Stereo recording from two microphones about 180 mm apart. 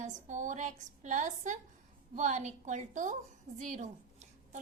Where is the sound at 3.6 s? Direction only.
40° right (ahead or behind).